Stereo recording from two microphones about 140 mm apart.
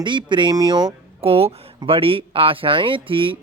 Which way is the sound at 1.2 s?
45° right (ahead or behind).